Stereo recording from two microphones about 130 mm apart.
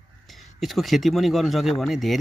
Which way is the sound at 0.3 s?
Centre (ahead or behind).